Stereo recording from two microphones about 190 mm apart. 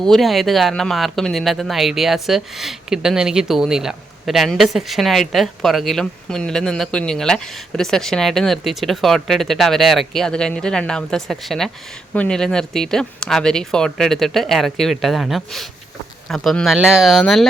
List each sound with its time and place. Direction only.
0.0 s speech: centre (ahead or behind)